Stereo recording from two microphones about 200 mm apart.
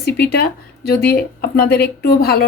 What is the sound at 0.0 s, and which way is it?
Speech, 50° left (ahead or behind).